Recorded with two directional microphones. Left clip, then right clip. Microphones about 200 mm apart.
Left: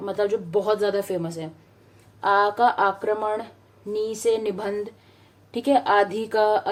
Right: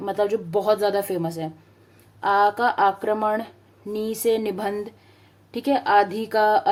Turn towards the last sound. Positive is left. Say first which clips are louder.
# right 2 dB
turn(degrees=-20)  # may be behind; listen again after turning